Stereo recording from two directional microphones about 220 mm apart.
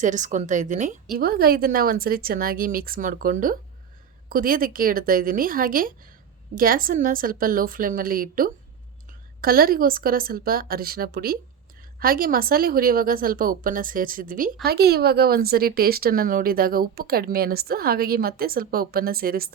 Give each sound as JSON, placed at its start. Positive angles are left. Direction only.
{"t": 0.0, "sound": "a woman's voice", "side_deg": -35}